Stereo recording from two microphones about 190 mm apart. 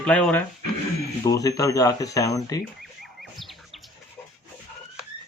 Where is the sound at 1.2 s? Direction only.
20° left (ahead or behind).